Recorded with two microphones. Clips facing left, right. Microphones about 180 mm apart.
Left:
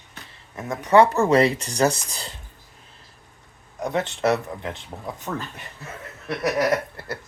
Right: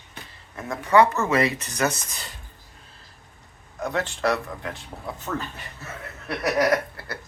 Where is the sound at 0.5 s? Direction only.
20° left (ahead or behind).